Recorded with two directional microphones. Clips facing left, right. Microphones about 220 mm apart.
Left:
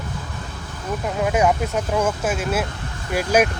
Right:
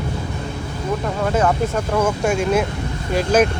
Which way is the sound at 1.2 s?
10° left (ahead or behind).